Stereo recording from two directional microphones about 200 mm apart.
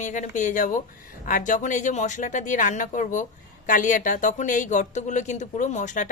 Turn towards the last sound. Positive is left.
turn(degrees=40)  # may be behind; listen again after turning